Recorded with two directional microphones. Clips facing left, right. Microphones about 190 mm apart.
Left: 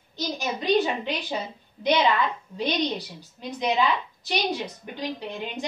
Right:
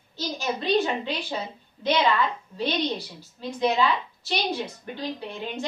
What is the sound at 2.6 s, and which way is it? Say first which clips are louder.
A woman's voice: even; 15° left (ahead or behind).